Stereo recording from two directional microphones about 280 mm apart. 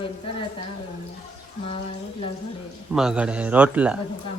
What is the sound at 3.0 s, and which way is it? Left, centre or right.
A man's voice, centre.